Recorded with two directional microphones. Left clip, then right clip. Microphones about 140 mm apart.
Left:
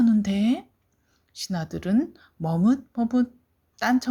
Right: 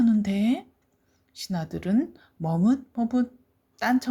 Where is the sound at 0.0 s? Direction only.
20° left (ahead or behind).